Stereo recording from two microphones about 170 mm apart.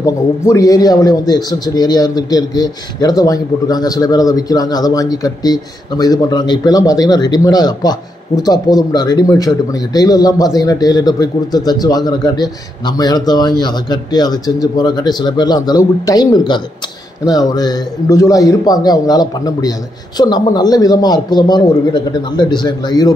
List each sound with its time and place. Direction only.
0.0 s a man's voice: 20° left (ahead or behind)